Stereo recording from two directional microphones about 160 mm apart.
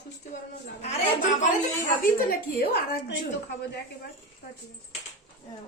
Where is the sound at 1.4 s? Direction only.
50° left (ahead or behind).